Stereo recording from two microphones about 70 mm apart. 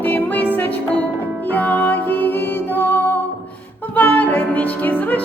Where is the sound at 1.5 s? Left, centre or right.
Left.